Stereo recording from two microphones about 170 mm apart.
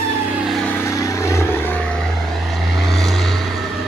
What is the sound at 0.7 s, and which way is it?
Vehicle, 15° left (ahead or behind).